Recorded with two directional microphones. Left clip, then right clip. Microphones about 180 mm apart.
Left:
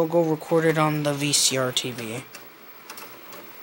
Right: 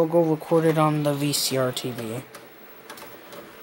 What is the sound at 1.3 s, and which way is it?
Speech, 45° right (ahead or behind).